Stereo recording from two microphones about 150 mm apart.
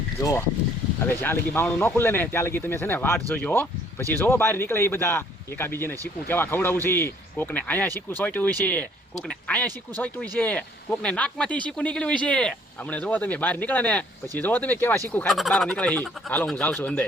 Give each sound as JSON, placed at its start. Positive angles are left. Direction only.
{"t": 0.2, "sound": "speech", "side_deg": 20}
{"t": 15.3, "sound": "speech", "side_deg": 0}